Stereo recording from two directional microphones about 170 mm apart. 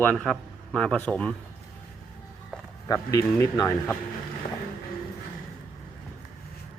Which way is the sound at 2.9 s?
20° left (ahead or behind).